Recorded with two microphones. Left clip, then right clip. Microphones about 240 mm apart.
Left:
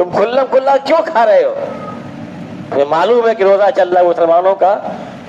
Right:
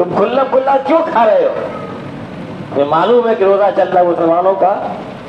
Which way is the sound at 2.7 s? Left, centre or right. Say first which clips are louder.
Even; left.